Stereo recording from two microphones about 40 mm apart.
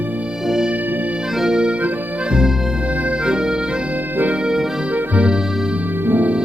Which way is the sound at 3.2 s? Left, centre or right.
Right.